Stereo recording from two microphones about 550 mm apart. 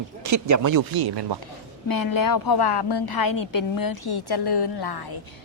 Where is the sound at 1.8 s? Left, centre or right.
Left.